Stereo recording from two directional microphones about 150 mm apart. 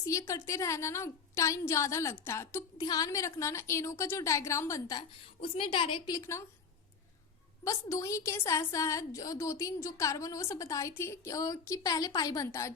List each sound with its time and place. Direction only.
0.0 s a woman's voice: 20° left (ahead or behind)
5.2 s a woman's voice: 35° left (ahead or behind); by 6.4 s 20° left (ahead or behind)
7.6 s a woman's voice: 20° left (ahead or behind)